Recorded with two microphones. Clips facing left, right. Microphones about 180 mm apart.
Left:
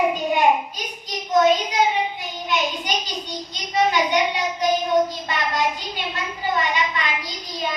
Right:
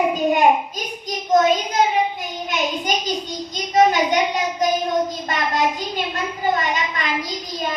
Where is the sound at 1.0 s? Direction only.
45° right (ahead or behind).